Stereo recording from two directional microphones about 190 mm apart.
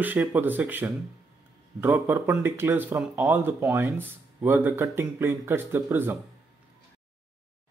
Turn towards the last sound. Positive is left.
turn(degrees=-10)  # may be behind; listen again after turning